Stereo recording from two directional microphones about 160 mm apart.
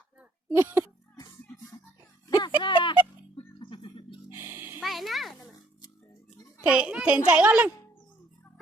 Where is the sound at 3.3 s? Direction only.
30° left (ahead or behind).